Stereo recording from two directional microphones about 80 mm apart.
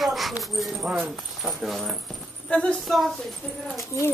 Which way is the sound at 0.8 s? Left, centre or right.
Centre.